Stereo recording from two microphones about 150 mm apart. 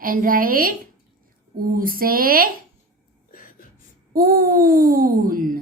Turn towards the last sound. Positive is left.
turn(degrees=-65)  # may be behind; listen again after turning